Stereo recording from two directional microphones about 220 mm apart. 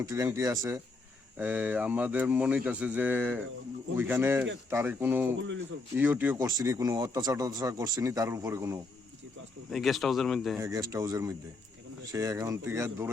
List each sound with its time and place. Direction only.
0.0 s speech: 15° right (ahead or behind)
9.6 s speech: centre (ahead or behind)
10.6 s speech: 15° right (ahead or behind)